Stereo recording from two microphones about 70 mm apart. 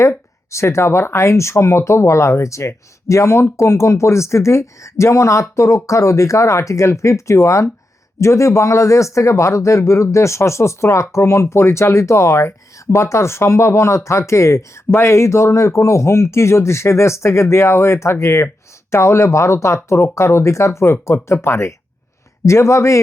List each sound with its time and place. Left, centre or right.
0.5 s speech: left